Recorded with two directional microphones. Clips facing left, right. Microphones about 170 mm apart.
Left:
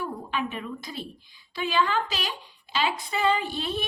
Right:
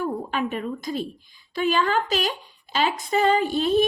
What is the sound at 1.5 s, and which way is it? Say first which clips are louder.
A woman's voice: right 4 dB; 45° right (ahead or behind).